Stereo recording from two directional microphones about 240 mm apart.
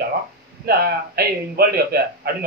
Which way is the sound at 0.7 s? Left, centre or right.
Right.